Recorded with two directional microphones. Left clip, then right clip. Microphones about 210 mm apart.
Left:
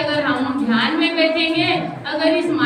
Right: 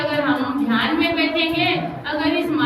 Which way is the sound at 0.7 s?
10° left (ahead or behind).